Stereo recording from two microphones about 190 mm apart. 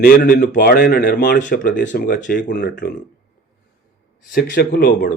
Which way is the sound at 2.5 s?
60° left (ahead or behind).